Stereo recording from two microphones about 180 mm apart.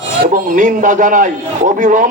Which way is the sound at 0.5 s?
45° right (ahead or behind).